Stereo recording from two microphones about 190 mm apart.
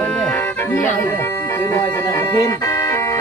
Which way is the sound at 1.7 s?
15° left (ahead or behind).